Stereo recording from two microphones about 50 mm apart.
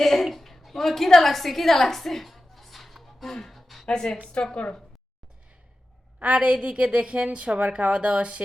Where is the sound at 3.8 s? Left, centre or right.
Centre.